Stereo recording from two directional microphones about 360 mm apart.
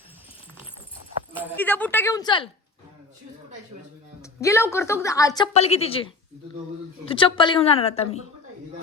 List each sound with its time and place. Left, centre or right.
1.3 s speech: centre
4.2 s a woman's voice: centre